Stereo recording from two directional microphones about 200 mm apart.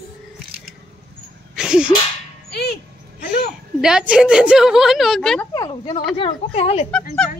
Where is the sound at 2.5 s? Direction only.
55° left (ahead or behind).